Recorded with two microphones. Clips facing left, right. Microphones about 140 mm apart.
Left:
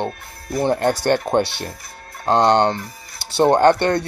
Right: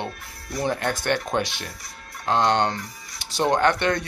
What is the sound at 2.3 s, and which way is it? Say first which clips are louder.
Speech: left 6 dB; 55° left (ahead or behind).